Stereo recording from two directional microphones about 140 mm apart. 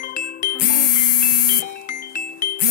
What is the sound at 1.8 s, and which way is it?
Music, 75° left (ahead or behind).